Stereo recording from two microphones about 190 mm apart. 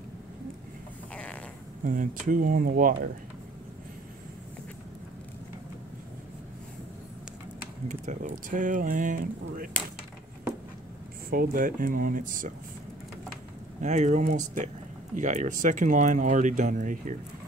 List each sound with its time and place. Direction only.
1.1 s a sound: 5° left (ahead or behind)
1.9 s speech: 45° right (ahead or behind)
7.9 s speech: 40° right (ahead or behind)
11.2 s speech: 50° right (ahead or behind)
13.7 s speech: 40° right (ahead or behind)